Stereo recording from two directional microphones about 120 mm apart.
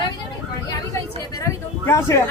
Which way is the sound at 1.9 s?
25° left (ahead or behind).